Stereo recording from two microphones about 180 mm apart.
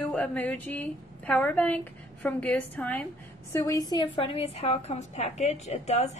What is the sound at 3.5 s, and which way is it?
A woman's voice, 20° left (ahead or behind).